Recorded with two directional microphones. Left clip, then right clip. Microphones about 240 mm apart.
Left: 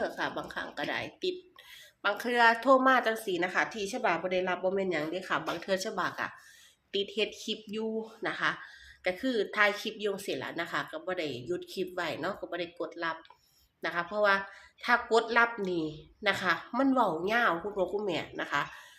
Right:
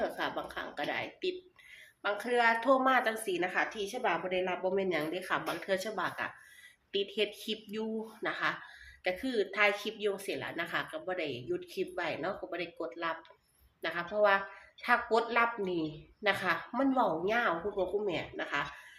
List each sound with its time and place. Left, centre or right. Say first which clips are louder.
0.0 s a sound: left 1 dB; left
2.0 s a woman's voice: left 4 dB; left
4.4 s a woman's voice: left 2 dB; centre